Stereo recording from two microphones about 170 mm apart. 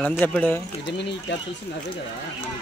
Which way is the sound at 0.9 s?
90° left.